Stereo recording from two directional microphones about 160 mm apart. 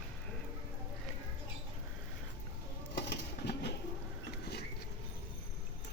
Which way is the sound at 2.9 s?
90° left.